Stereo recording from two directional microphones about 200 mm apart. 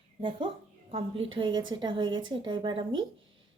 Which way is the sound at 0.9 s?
30° right (ahead or behind).